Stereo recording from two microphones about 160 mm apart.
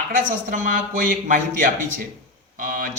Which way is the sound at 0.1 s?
55° right (ahead or behind).